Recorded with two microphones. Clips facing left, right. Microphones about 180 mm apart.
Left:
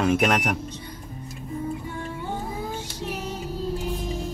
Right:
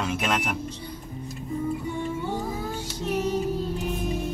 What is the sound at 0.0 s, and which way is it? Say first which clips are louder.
Speech: left 6 dB; 55° left (ahead or behind).